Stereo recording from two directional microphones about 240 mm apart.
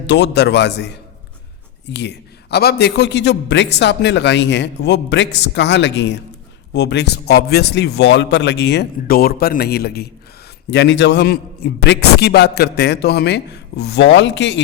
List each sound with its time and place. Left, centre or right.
0.1 s a man's voice: left
1.9 s a man's voice: left